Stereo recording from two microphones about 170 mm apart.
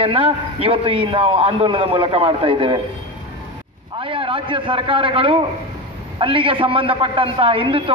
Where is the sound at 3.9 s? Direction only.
30° right (ahead or behind).